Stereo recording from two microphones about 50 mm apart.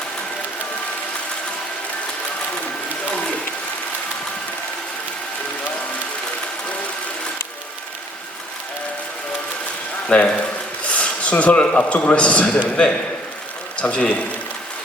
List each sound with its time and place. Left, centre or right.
10.1 s a man's voice: left